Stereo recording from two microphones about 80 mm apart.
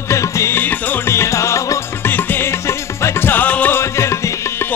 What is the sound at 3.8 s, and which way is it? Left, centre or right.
Music, left.